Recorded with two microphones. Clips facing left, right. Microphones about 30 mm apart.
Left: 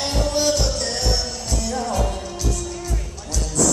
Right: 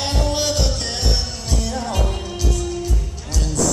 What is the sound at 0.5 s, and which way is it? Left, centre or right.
Music, right.